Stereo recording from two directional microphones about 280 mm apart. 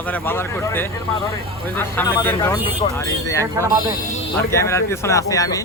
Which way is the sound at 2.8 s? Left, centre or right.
Left.